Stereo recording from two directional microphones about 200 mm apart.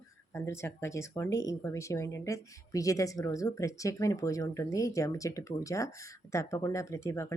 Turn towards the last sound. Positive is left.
turn(degrees=15)  # may be behind; listen again after turning